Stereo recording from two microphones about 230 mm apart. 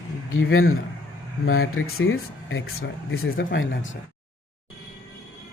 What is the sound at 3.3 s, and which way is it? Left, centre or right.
Speech, left.